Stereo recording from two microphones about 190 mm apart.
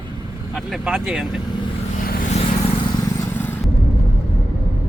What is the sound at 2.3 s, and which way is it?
Vehicle, 35° left (ahead or behind).